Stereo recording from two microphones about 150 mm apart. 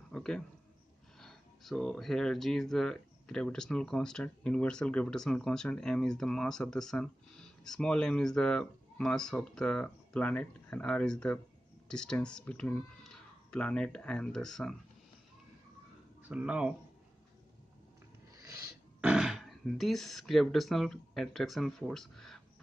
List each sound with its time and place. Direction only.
0.1 s speech: 5° left (ahead or behind)
16.3 s speech: 10° right (ahead or behind)
18.3 s filing: 20° right (ahead or behind)
18.9 s speech: 5° right (ahead or behind)